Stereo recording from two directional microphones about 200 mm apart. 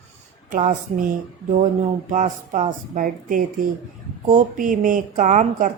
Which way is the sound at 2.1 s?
35° right (ahead or behind).